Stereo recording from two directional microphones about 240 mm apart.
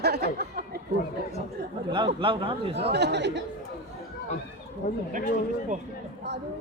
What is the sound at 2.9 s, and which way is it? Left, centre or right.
Speech, right.